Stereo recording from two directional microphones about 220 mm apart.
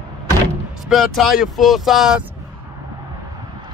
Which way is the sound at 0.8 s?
Centre (ahead or behind).